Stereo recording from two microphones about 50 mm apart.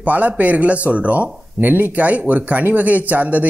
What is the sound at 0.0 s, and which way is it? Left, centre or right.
Speech, right.